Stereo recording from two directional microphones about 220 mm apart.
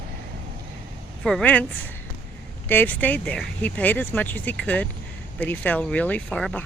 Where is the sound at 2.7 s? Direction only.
10° left (ahead or behind).